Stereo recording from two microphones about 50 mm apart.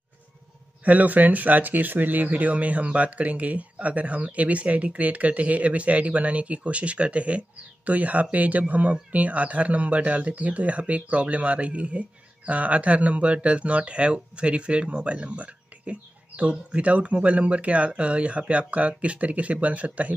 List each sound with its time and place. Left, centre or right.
0.8 s speech: right